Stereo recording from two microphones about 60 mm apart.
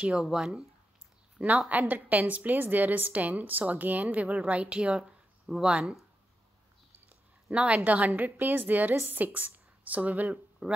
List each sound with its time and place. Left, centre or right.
0.2 s speech: centre
1.7 s a woman's voice: right
7.5 s a woman's voice: right